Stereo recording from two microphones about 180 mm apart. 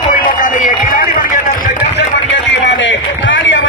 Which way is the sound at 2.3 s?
85° left.